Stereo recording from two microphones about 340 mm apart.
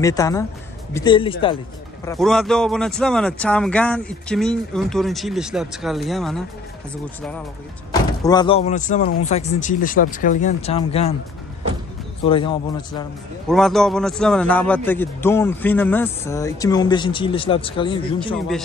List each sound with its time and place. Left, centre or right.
0.0 s a man's voice: centre
2.0 s speech: centre
12.2 s speech: centre
13.5 s a man's voice: centre